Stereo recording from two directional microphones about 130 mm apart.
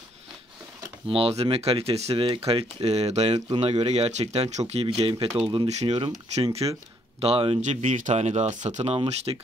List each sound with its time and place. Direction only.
1.0 s speech: 45° right (ahead or behind)
4.8 s speech: 45° right (ahead or behind)
7.2 s speech: 45° right (ahead or behind)
7.6 s speech: 70° right (ahead or behind); by 9.4 s 50° right (ahead or behind)